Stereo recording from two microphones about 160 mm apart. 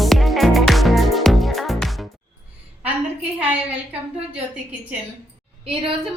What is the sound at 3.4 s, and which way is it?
Speech, 10° right (ahead or behind).